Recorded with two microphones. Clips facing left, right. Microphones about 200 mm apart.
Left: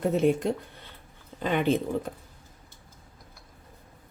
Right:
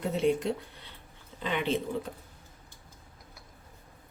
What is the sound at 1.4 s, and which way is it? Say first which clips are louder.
Speech: left 6 dB; 50° left (ahead or behind).